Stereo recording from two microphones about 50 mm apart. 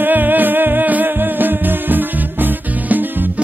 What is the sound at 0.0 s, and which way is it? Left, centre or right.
Music, right.